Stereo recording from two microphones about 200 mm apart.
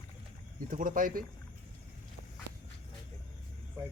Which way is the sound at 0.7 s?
45° right (ahead or behind).